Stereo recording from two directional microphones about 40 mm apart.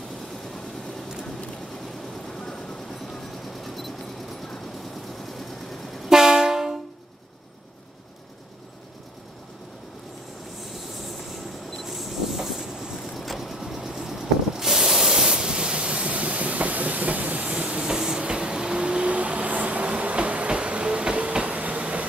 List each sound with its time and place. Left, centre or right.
2.2 s vehicle: centre
6.0 s train: centre
10.6 s train: centre
13.0 s vehicle: centre; by 17.6 s right
17.6 s train: right
17.9 s vehicle: centre; by 22.0 s right